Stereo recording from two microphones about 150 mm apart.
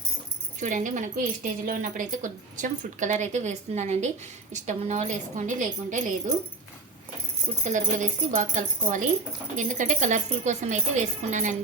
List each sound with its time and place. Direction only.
0.6 s a woman's voice: 60° right (ahead or behind)
7.6 s a woman's voice: 55° right (ahead or behind)